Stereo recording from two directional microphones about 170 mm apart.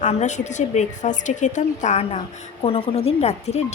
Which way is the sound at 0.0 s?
45° left (ahead or behind).